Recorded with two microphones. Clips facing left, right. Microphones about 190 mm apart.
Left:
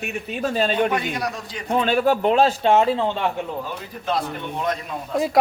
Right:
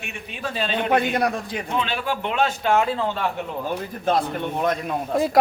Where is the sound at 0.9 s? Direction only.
55° right (ahead or behind).